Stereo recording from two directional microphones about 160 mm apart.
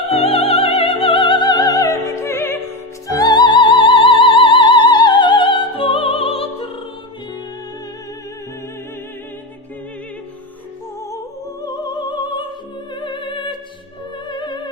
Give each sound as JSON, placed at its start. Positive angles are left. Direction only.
{"t": 0.1, "sound": "music", "side_deg": 40}
{"t": 3.2, "sound": "music", "side_deg": 25}
{"t": 11.6, "sound": "opera", "side_deg": 25}
{"t": 12.9, "sound": "music", "side_deg": 30}